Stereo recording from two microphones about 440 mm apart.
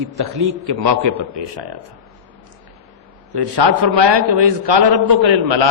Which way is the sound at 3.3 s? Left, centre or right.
Right.